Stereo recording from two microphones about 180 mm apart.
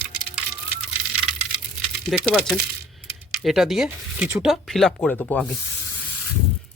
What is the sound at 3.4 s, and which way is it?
Speech, centre (ahead or behind).